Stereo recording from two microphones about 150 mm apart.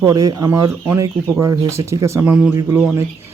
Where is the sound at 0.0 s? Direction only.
25° right (ahead or behind).